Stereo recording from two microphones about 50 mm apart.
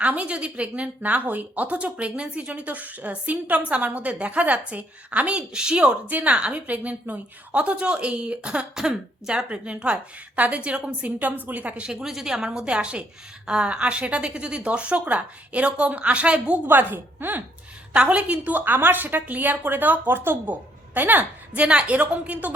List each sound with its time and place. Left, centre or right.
0.0 s a woman's voice: right
11.2 s a woman's voice: right
12.0 s a woman's voice: centre
16.6 s a woman's voice: right
17.9 s a woman's voice: right
18.5 s a woman's voice: right
21.6 s a woman's voice: right